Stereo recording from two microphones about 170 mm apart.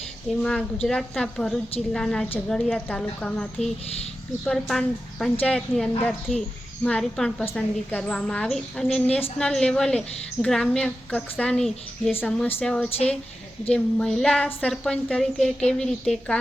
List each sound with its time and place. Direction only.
0.4 s a woman's voice: 5° left (ahead or behind)